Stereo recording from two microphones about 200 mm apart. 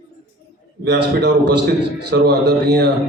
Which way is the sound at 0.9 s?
60° right (ahead or behind).